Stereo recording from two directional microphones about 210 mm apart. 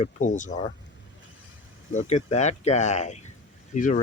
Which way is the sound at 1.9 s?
35° left (ahead or behind).